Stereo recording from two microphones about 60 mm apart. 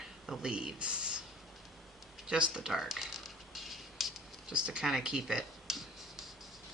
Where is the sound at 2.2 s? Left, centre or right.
Centre.